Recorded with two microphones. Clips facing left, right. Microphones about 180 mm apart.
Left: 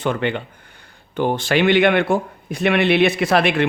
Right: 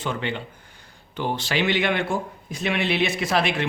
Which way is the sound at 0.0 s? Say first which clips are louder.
Left 7 dB; 60° left (ahead or behind).